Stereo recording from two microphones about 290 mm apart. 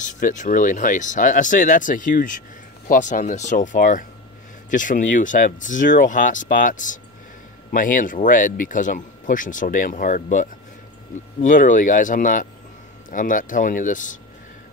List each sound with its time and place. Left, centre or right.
0.0 s speech: left